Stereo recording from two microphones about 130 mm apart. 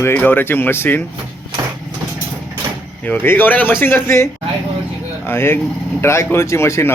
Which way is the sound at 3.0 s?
10° left (ahead or behind).